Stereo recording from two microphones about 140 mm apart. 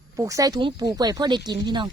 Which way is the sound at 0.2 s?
25° right (ahead or behind).